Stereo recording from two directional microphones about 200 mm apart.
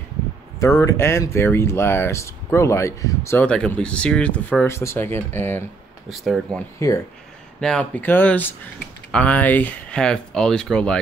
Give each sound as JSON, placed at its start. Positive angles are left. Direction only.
{"t": 0.6, "sound": "speech", "side_deg": 15}
{"t": 6.0, "sound": "speech", "side_deg": 0}
{"t": 6.8, "sound": "speech", "side_deg": 15}